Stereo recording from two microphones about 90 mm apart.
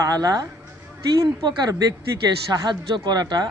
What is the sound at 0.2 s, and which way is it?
Speech, 45° right (ahead or behind).